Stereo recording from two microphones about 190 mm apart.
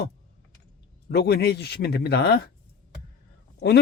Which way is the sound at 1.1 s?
55° left (ahead or behind).